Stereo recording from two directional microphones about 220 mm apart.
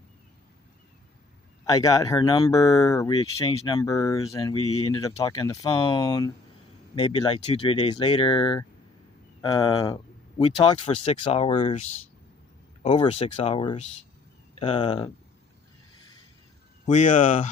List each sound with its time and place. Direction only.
1.6 s speech: 15° left (ahead or behind); by 11.9 s 30° left (ahead or behind)
13.0 s speech: 25° left (ahead or behind)
16.8 s speech: 35° left (ahead or behind)